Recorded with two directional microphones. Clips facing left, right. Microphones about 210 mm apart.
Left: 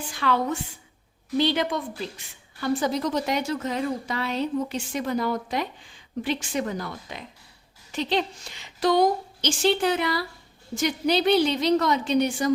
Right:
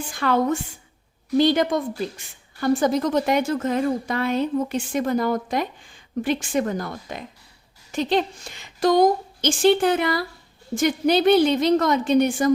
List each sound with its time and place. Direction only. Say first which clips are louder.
0.1 s a woman's voice: right 4 dB; 45° right (ahead or behind)